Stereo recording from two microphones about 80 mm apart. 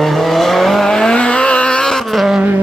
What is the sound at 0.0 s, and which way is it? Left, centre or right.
Vehicle, centre.